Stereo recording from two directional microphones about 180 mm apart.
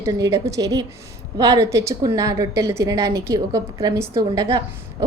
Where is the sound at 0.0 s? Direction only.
15° right (ahead or behind).